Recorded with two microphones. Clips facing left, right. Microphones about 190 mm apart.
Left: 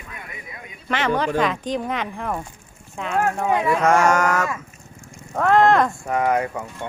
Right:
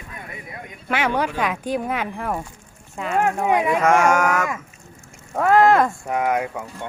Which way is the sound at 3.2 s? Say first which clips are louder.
Right 1 dB; 15° right (ahead or behind).